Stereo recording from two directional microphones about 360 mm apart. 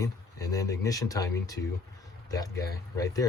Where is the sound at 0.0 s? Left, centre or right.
Centre.